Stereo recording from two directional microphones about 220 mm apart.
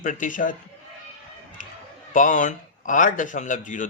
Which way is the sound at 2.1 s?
35° left (ahead or behind).